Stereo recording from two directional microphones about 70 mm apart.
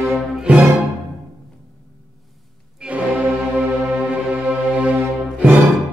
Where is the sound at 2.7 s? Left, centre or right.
Centre.